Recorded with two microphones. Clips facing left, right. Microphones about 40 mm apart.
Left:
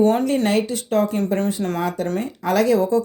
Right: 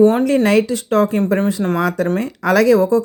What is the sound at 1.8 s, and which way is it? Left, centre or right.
Speech, right.